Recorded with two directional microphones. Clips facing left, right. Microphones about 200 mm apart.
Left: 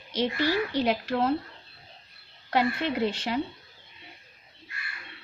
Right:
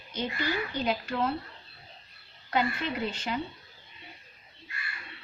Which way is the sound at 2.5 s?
75° left (ahead or behind).